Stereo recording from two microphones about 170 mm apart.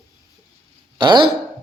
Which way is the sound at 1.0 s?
25° right (ahead or behind).